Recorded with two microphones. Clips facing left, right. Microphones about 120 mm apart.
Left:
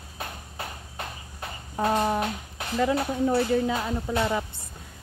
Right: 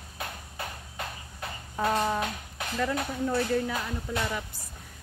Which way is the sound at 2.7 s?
25° left (ahead or behind).